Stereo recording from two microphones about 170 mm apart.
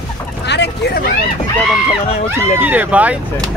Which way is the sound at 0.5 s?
80° left.